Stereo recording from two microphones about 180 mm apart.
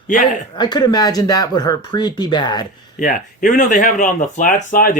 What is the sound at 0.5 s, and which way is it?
Speech, 25° left (ahead or behind).